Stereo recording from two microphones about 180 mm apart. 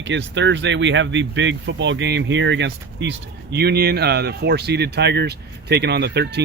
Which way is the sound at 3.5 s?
65° right (ahead or behind).